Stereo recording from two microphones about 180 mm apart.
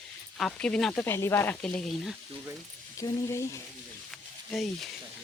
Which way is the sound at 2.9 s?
15° left (ahead or behind).